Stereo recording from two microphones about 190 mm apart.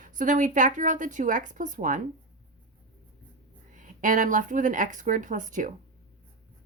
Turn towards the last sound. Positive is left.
turn(degrees=-40)  # may be behind; listen again after turning